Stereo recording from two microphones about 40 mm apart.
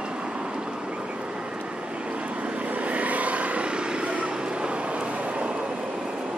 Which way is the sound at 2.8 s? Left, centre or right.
Right.